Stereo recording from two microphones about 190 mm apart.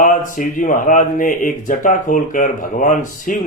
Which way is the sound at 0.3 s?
45° left (ahead or behind).